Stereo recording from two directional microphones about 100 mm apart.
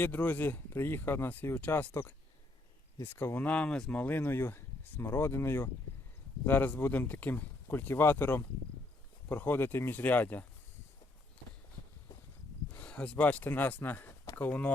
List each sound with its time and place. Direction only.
0.0 s speech: 20° left (ahead or behind)
12.8 s speech: 15° left (ahead or behind)